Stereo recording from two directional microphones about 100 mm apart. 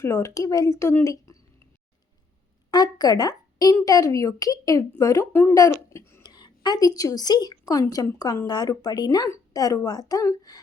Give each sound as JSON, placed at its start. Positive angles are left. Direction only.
{"t": 0.0, "sound": "speech", "side_deg": 30}
{"t": 2.6, "sound": "a woman's voice", "side_deg": 40}
{"t": 6.2, "sound": "a woman's voice", "side_deg": 45}